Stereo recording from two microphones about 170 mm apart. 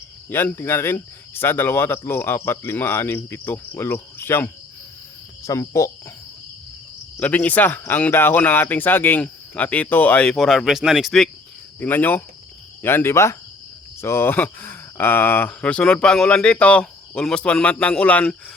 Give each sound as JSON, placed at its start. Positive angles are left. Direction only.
{"t": 0.3, "sound": "speech", "side_deg": 10}
{"t": 7.2, "sound": "speech", "side_deg": 10}
{"t": 11.8, "sound": "speech", "side_deg": 10}